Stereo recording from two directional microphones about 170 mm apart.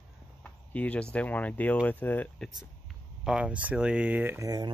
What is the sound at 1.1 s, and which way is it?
Speech, 10° left (ahead or behind).